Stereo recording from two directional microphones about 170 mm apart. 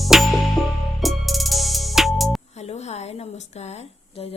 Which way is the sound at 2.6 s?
40° left (ahead or behind).